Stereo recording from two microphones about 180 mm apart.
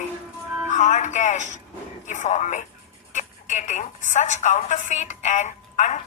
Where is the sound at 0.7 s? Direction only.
40° left (ahead or behind).